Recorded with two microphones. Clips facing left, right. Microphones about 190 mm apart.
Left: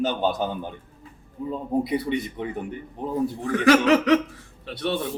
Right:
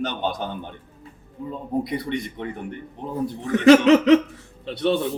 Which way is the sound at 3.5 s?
25° right (ahead or behind).